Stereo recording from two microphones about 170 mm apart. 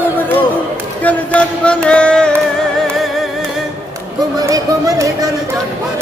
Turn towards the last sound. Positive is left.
turn(degrees=-20)  # may be behind; listen again after turning